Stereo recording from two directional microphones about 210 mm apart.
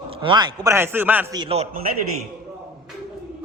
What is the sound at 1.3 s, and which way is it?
Speech, 25° right (ahead or behind).